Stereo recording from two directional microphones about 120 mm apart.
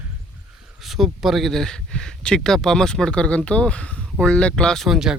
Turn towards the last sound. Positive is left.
turn(degrees=-5)  # may be behind; listen again after turning